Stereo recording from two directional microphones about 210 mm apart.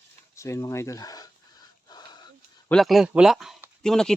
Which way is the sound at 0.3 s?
15° left (ahead or behind).